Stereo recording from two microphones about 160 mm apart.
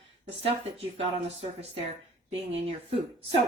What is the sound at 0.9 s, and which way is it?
Speech, 35° right (ahead or behind).